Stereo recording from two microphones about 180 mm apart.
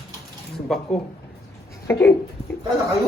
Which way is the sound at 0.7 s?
Centre (ahead or behind).